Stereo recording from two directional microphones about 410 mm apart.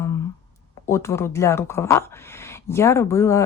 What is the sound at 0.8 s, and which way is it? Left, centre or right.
Speech, centre.